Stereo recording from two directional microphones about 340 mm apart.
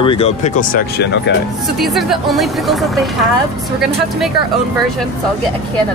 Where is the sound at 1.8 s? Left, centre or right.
Centre.